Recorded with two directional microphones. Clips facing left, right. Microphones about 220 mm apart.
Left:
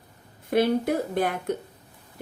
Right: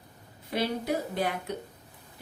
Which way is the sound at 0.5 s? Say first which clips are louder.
Left 7 dB; 55° left (ahead or behind).